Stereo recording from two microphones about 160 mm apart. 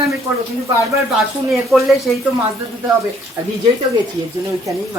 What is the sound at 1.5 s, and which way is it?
Speech, centre (ahead or behind).